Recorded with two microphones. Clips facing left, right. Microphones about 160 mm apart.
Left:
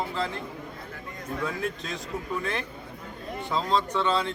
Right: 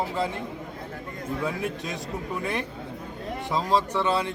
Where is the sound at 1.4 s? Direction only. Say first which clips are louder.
Right 1 dB; 15° right (ahead or behind).